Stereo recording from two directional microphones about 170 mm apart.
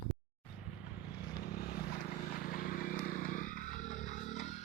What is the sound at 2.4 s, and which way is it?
Vehicle, 55° left (ahead or behind).